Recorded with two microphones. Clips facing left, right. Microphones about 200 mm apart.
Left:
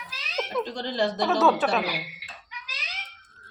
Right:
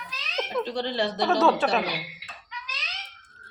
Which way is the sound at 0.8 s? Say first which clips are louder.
Even; 45° left (ahead or behind).